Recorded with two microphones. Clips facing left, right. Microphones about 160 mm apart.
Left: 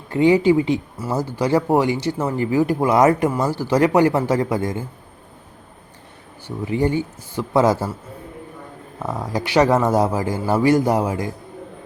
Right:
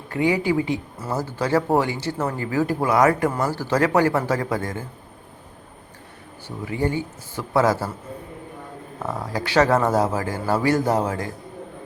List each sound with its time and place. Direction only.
0.1 s a man's voice: 25° left (ahead or behind)
6.7 s a man's voice: 20° left (ahead or behind)
9.0 s speech: 15° left (ahead or behind)